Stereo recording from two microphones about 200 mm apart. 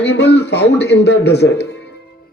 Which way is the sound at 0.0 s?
55° left (ahead or behind).